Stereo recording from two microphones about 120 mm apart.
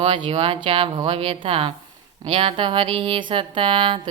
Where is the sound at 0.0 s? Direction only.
50° right (ahead or behind).